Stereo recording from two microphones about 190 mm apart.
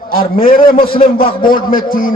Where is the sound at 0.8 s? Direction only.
30° left (ahead or behind).